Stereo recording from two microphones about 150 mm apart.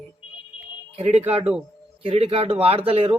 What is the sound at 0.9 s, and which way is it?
Speech, 45° right (ahead or behind).